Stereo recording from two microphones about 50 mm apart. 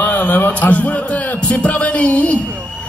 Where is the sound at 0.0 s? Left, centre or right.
Left.